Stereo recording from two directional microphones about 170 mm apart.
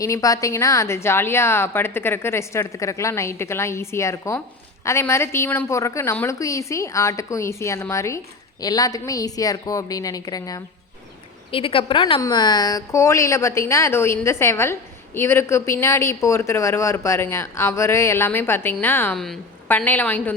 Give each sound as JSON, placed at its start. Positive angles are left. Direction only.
{"t": 0.0, "sound": "a woman's voice", "side_deg": 20}
{"t": 11.5, "sound": "a woman's voice", "side_deg": 30}